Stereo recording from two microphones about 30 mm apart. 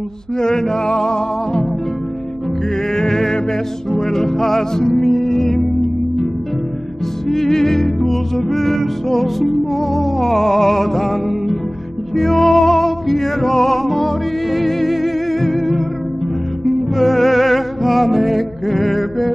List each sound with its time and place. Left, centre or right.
0.4 s music: centre
2.9 s music: centre
7.2 s music: centre